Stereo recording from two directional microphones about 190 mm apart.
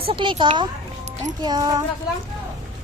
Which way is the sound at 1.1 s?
35° right (ahead or behind).